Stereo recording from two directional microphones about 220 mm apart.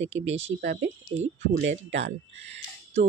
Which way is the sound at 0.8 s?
55° right (ahead or behind).